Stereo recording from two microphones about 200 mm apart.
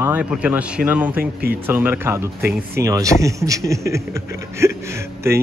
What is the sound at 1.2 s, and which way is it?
Speech, 50° right (ahead or behind).